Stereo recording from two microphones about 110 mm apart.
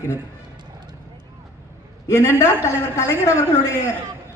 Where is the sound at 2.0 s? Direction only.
25° left (ahead or behind).